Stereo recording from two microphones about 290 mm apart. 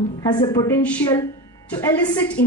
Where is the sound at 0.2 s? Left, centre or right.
Centre.